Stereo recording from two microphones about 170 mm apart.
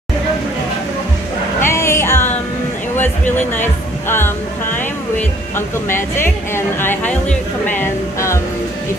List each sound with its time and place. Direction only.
1.6 s music: 15° left (ahead or behind)
4.1 s speech: 15° left (ahead or behind)
5.9 s a sound: 15° left (ahead or behind)